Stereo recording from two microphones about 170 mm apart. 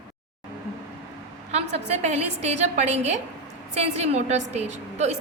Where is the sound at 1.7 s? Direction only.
40° right (ahead or behind).